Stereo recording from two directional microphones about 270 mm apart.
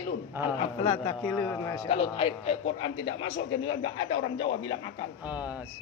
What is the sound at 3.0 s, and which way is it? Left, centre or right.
A man's voice, left.